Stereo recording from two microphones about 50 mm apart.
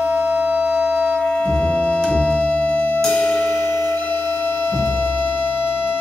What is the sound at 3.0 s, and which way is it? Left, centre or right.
Music, left.